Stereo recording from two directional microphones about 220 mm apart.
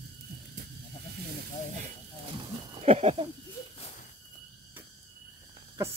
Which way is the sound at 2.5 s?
25° right (ahead or behind).